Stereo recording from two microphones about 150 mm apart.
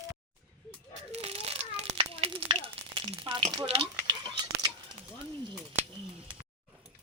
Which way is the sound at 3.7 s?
40° right (ahead or behind).